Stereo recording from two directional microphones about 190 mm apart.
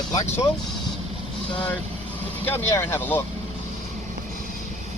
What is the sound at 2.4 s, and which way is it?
Speech, 10° left (ahead or behind).